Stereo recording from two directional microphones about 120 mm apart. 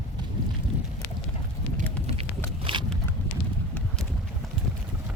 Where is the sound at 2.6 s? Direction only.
45° right (ahead or behind).